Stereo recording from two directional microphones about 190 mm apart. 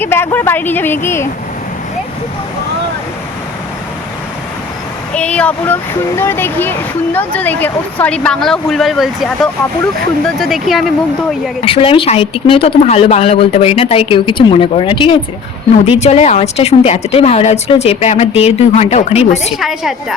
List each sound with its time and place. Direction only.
0.0 s speech: 10° left (ahead or behind)
5.1 s speech: 5° left (ahead or behind)
11.6 s speech: 30° left (ahead or behind)
19.5 s speech: centre (ahead or behind)